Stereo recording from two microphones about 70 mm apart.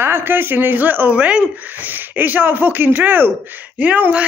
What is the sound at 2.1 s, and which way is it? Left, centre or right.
Speech, right.